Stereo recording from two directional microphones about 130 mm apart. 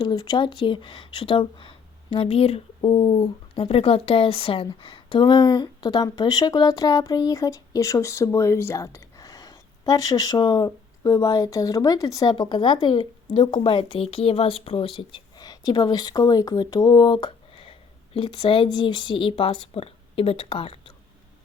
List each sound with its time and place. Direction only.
0.0 s speech: 35° left (ahead or behind)